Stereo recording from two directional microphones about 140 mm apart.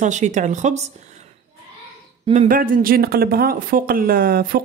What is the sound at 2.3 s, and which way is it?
Speech, 70° right (ahead or behind).